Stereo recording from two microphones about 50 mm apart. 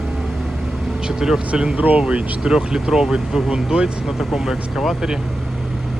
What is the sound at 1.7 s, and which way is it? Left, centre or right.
Speech, right.